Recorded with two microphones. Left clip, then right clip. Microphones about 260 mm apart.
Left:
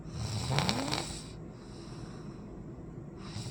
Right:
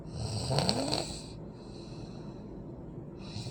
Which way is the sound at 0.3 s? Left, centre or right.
Centre.